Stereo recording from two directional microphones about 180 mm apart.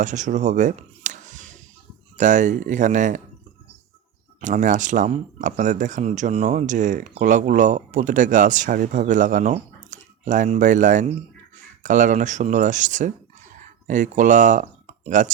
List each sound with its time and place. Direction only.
0.0 s speech: 45° right (ahead or behind)
4.4 s speech: 45° right (ahead or behind)